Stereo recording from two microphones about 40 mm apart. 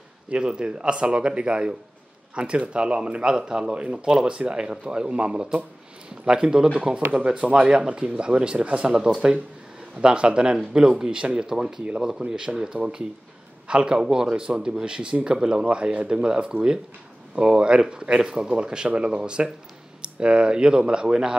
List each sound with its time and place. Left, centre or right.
0.3 s speech: right
10.0 s speech: right